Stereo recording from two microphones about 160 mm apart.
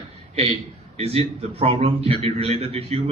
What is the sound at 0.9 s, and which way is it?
A man's voice, 40° right (ahead or behind).